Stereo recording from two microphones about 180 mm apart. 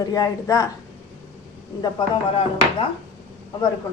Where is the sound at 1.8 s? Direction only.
30° left (ahead or behind).